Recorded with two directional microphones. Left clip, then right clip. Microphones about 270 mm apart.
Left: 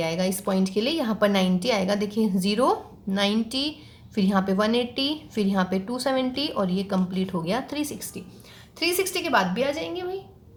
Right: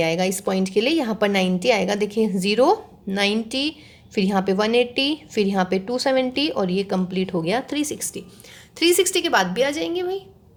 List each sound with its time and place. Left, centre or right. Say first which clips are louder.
0.0 s a woman's voice: right 5 dB; right